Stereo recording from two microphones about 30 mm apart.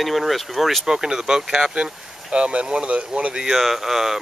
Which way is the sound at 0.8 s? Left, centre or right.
Right.